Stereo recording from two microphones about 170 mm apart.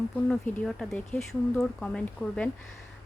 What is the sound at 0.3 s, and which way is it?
Speech, 5° left (ahead or behind).